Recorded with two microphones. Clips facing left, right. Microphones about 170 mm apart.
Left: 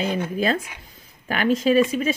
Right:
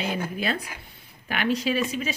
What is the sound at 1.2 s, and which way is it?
Speech, 45° left (ahead or behind).